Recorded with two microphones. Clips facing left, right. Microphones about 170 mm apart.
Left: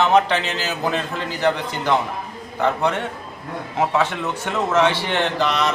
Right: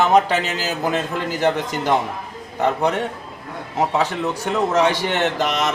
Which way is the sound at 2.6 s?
15° right (ahead or behind).